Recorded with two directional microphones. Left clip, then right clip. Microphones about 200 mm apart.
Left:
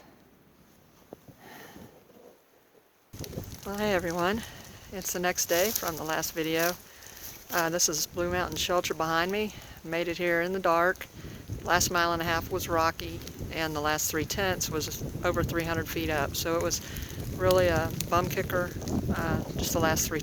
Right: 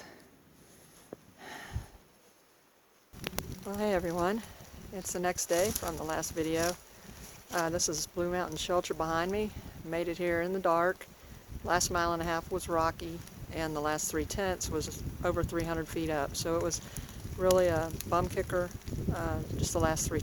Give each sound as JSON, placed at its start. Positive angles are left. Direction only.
{"t": 1.5, "sound": "sniff", "side_deg": -20}
{"t": 3.7, "sound": "speech", "side_deg": 5}